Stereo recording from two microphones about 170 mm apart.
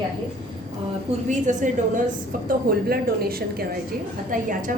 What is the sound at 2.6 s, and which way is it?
Speech, 65° right (ahead or behind).